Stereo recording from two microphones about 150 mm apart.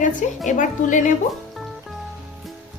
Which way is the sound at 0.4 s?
60° left (ahead or behind).